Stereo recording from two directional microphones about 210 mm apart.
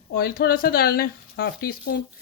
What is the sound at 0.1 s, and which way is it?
Speech, 45° left (ahead or behind).